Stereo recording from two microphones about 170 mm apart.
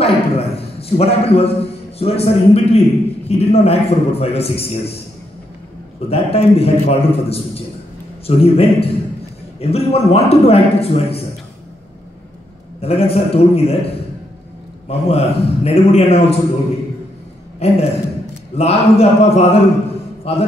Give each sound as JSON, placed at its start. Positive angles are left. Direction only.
{"t": 0.0, "sound": "a sound", "side_deg": 35}
{"t": 3.3, "sound": "a man's voice", "side_deg": 35}
{"t": 6.0, "sound": "a man's voice", "side_deg": 35}
{"t": 12.8, "sound": "a man's voice", "side_deg": 35}
{"t": 14.9, "sound": "a man's voice", "side_deg": 35}
{"t": 17.6, "sound": "a man's voice", "side_deg": 40}